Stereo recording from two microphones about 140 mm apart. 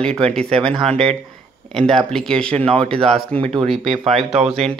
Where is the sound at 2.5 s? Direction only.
45° right (ahead or behind).